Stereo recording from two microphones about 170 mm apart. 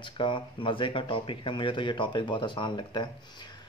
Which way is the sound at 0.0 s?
30° left (ahead or behind).